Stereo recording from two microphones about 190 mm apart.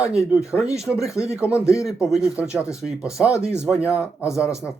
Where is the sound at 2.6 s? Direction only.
15° left (ahead or behind).